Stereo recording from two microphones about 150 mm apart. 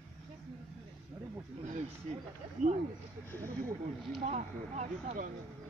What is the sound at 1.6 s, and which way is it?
Speech, 55° right (ahead or behind).